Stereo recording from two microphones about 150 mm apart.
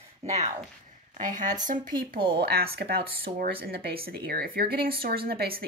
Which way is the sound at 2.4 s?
90° right.